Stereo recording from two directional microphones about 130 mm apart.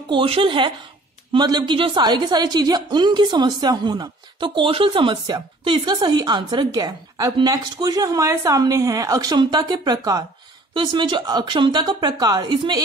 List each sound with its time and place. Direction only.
0.1 s a woman's voice: 45° right (ahead or behind)